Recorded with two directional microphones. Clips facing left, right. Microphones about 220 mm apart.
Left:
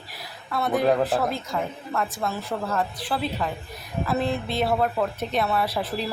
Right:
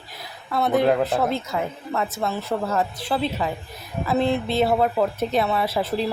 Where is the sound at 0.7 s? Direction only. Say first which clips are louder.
Right 2 dB; centre (ahead or behind).